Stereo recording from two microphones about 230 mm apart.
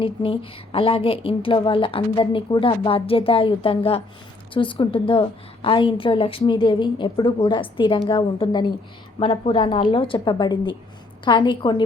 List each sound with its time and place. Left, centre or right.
0.0 s a woman's voice: left